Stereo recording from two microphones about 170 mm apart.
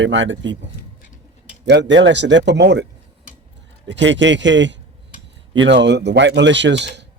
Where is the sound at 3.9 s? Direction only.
90° right.